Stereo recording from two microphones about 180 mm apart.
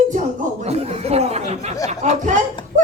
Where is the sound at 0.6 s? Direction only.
35° right (ahead or behind).